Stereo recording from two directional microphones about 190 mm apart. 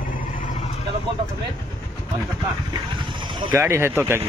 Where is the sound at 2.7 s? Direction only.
25° right (ahead or behind).